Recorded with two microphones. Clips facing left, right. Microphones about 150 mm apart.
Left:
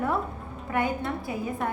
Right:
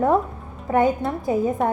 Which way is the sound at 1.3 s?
45° right (ahead or behind).